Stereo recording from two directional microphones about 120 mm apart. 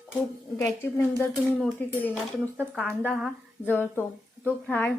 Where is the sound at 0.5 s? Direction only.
15° left (ahead or behind).